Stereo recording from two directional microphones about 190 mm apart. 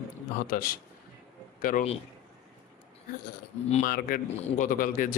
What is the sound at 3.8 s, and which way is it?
Speech, 50° left (ahead or behind).